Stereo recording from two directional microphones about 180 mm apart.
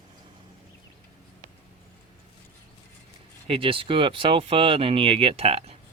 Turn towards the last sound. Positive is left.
turn(degrees=-35)  # may be behind; listen again after turning